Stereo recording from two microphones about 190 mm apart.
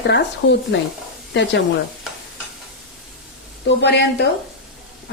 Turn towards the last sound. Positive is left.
turn(degrees=65)  # may be behind; listen again after turning